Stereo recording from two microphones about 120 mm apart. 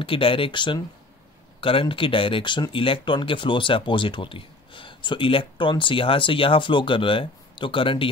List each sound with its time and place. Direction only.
0.0 s speech: 45° left (ahead or behind)